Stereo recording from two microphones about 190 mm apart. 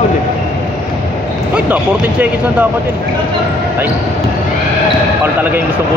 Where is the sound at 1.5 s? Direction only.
10° right (ahead or behind).